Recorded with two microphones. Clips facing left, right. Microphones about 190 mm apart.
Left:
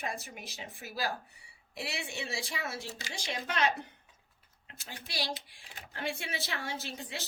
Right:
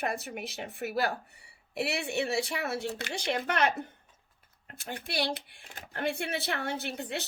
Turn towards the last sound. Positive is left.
turn(degrees=-60)  # may be behind; listen again after turning